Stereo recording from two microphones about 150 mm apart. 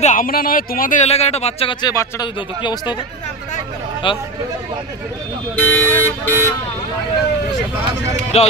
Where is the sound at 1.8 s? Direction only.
25° left (ahead or behind).